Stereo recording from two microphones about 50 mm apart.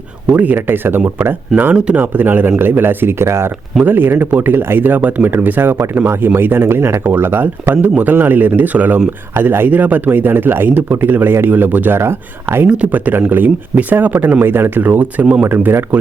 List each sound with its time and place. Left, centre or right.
0.3 s speech: right
0.7 s speech: right
1.7 s speech: centre
2.0 s speech: right
3.8 s speech: right
5.7 s speech: right
6.3 s speech: right
9.3 s speech: right
11.9 s speech: right
12.6 s speech: right
13.1 s speech: right